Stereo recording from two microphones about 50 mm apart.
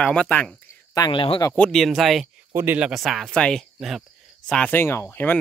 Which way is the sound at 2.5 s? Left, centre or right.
Right.